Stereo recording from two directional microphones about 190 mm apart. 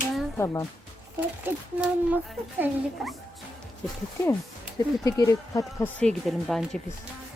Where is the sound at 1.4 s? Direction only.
10° right (ahead or behind).